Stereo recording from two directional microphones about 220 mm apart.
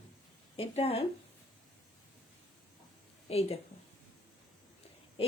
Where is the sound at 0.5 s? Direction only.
25° left (ahead or behind).